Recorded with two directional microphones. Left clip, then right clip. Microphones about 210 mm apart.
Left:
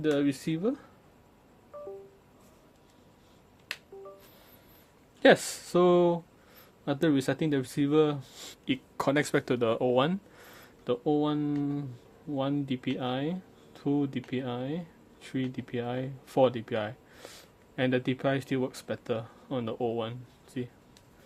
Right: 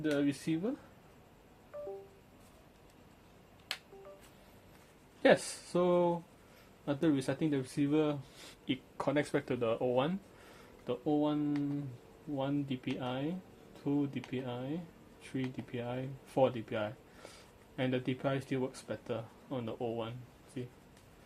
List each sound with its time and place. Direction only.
0.0 s speech: 55° left (ahead or behind)
5.2 s speech: 55° left (ahead or behind)